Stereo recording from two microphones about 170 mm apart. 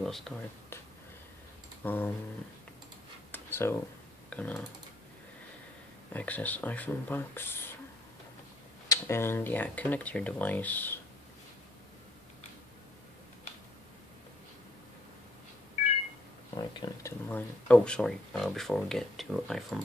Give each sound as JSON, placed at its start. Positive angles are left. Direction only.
{"t": 0.0, "sound": "speech", "side_deg": 0}
{"t": 1.8, "sound": "speech", "side_deg": 10}
{"t": 3.3, "sound": "a sound", "side_deg": 10}
{"t": 4.3, "sound": "speech", "side_deg": 10}
{"t": 6.1, "sound": "speech", "side_deg": 10}
{"t": 8.8, "sound": "speech", "side_deg": 20}
{"t": 16.5, "sound": "speech", "side_deg": 25}
{"t": 17.3, "sound": "speech", "side_deg": 10}